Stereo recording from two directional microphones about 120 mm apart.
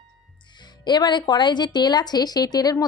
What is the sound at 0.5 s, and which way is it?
Speech, 35° left (ahead or behind).